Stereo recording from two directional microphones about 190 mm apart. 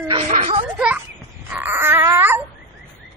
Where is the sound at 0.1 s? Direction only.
30° right (ahead or behind).